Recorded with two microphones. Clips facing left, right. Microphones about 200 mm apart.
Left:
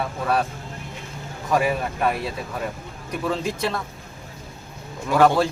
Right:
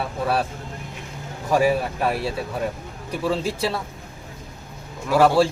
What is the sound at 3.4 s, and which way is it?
Speech, 35° right (ahead or behind).